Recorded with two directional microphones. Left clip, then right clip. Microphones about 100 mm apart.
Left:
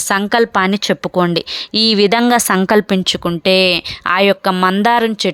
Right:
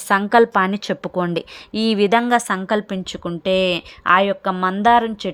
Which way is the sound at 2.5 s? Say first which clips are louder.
Left 8 dB; 85° left.